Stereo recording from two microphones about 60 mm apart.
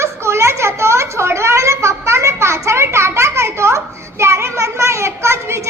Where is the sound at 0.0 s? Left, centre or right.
Right.